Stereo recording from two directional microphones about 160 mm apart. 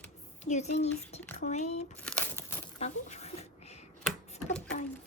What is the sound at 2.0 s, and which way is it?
Crumpling, 10° left (ahead or behind).